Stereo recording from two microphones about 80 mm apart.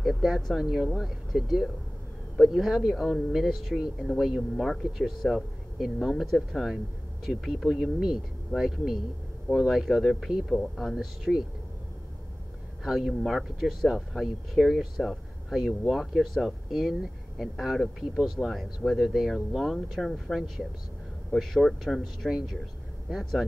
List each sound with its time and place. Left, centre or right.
0.0 s speech: centre
12.8 s speech: centre